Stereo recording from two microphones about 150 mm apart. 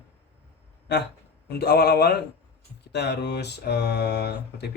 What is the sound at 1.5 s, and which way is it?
Speech, 90° left.